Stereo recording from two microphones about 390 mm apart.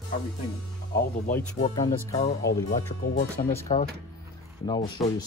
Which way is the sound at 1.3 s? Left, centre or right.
Centre.